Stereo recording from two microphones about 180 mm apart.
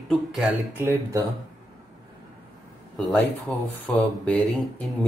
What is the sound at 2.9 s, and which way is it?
Speech, centre (ahead or behind).